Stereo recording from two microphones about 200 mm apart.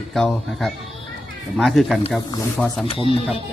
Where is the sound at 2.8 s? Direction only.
25° left (ahead or behind).